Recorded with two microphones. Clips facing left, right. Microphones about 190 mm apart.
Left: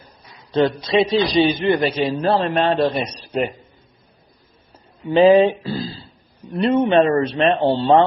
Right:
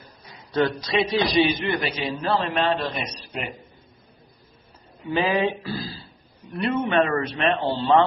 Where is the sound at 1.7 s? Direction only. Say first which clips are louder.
Left 8 dB; 35° left (ahead or behind).